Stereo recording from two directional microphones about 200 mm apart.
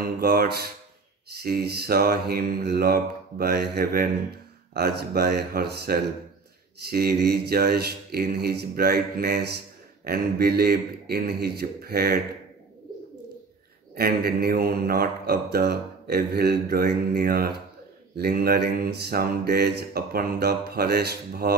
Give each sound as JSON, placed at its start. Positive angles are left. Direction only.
{"t": 0.0, "sound": "mantra", "side_deg": -50}
{"t": 13.9, "sound": "mantra", "side_deg": -50}